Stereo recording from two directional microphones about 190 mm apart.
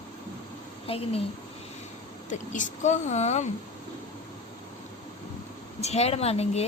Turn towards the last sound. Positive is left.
turn(degrees=35)  # may be behind; listen again after turning